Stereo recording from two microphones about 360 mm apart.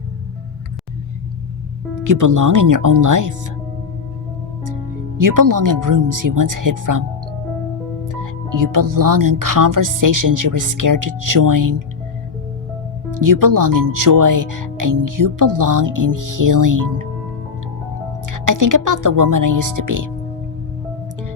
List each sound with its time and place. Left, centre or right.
2.0 s speech: right
5.1 s speech: right
8.0 s speech: right
13.1 s speech: right
18.3 s speech: right